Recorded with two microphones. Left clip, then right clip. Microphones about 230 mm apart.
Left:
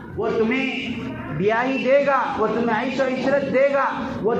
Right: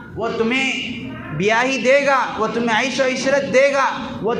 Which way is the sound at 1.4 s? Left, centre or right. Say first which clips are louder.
Right 4 dB; right.